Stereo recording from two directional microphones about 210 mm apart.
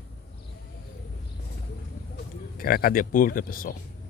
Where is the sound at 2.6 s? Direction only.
45° left (ahead or behind).